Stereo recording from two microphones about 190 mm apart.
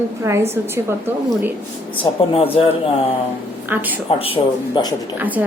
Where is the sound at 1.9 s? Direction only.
25° left (ahead or behind).